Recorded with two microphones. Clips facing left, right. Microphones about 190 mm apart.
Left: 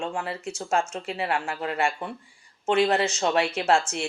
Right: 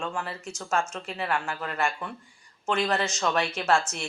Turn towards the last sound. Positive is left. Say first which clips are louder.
# left 2 dB
turn(degrees=30)  # may be behind; listen again after turning